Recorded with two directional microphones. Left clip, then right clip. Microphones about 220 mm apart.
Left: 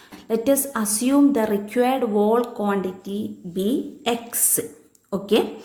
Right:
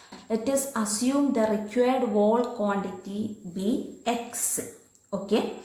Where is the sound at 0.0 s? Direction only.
45° left (ahead or behind).